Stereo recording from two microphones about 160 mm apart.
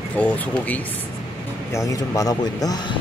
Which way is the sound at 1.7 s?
20° left (ahead or behind).